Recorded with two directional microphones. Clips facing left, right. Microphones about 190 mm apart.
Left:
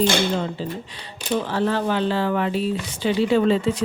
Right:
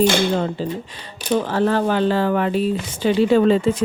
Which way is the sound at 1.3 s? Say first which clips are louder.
Right 4 dB; 45° right (ahead or behind).